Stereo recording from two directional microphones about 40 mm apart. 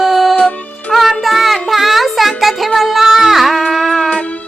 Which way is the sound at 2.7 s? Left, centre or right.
Centre.